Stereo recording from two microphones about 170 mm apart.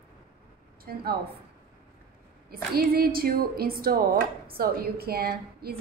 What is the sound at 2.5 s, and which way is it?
A woman's voice, 65° right (ahead or behind).